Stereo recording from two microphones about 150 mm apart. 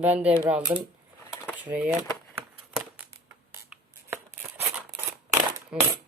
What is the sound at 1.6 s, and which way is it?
Speech, 10° right (ahead or behind).